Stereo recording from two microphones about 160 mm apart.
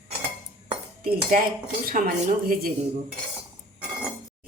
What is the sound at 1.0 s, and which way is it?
Dishes, 70° right (ahead or behind).